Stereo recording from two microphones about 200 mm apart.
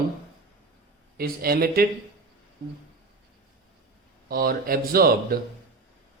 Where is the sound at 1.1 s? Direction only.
50° right (ahead or behind).